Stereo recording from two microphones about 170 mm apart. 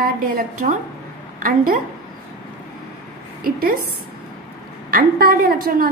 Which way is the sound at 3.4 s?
60° right (ahead or behind).